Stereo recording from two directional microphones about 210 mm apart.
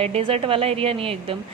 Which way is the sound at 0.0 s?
25° right (ahead or behind).